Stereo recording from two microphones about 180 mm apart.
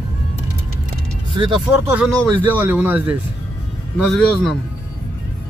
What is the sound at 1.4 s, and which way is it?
Vehicle, 25° right (ahead or behind).